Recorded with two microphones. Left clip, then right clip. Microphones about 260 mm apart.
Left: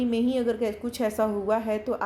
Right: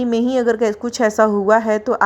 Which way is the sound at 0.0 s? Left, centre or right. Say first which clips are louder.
Right 9 dB; right.